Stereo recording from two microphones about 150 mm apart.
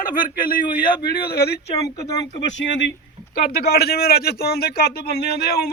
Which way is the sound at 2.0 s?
25° left (ahead or behind).